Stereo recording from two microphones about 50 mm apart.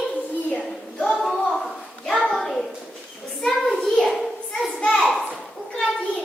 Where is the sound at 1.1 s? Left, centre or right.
Centre.